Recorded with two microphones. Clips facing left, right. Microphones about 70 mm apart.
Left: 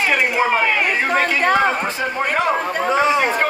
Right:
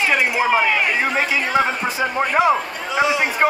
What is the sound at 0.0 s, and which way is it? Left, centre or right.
Speech, centre.